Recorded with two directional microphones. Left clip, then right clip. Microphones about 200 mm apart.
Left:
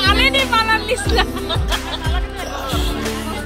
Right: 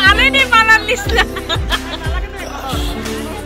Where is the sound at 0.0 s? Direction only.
5° left (ahead or behind).